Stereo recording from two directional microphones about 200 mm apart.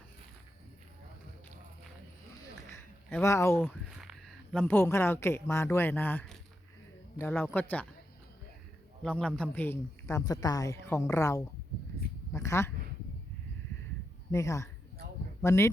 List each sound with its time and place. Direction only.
2.6 s a sound: 10° left (ahead or behind)
3.8 s a man's voice: 5° right (ahead or behind)
9.0 s a man's voice: 5° left (ahead or behind)
14.3 s a man's voice: 15° left (ahead or behind)